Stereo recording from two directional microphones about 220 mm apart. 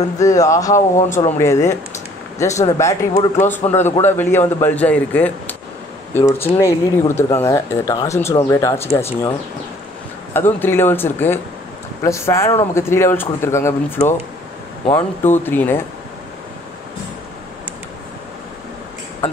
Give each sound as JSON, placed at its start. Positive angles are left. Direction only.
{"t": 0.2, "sound": "speech", "side_deg": 15}
{"t": 0.9, "sound": "speech", "side_deg": 35}
{"t": 1.4, "sound": "speech", "side_deg": 10}
{"t": 10.3, "sound": "speech", "side_deg": 10}